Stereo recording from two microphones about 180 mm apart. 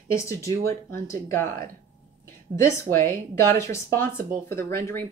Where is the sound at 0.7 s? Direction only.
15° left (ahead or behind).